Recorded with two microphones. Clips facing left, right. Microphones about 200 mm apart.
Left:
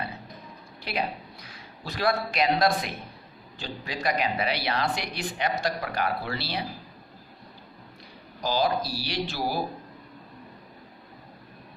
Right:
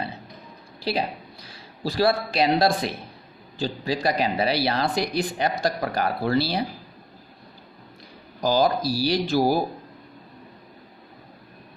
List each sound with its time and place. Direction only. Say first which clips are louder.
0.8 s a woman's voice: right 5 dB; 30° right (ahead or behind)
8.4 s speech: right 5 dB; 45° right (ahead or behind)